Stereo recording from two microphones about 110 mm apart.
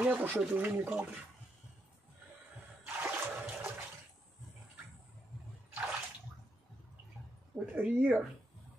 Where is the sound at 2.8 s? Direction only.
20° right (ahead or behind).